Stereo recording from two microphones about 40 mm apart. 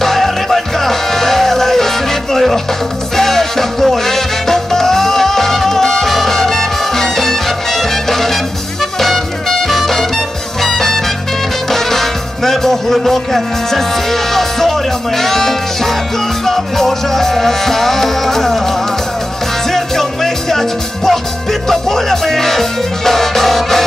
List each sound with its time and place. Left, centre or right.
0.0 s music: centre
19.7 s music: centre